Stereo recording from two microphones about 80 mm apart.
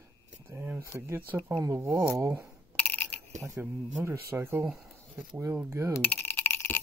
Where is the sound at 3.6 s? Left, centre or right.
Right.